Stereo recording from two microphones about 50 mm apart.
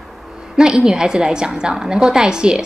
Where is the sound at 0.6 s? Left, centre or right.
Centre.